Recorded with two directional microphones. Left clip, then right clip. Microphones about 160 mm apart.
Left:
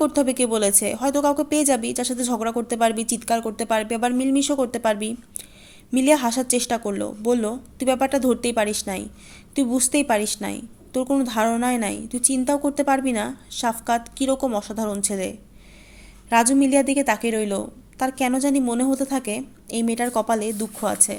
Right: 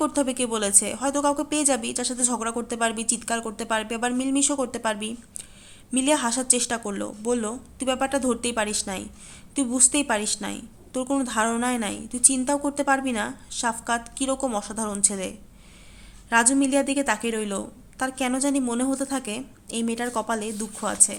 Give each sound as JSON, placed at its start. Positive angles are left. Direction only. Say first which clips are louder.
{"t": 0.0, "sound": "a woman's voice", "louder": "left 4 dB", "side_deg": 20}